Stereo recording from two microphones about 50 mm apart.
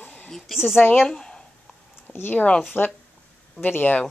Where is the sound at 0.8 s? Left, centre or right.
Left.